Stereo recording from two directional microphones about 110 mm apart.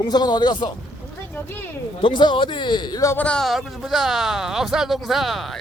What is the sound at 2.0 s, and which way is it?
Speech, 45° left (ahead or behind).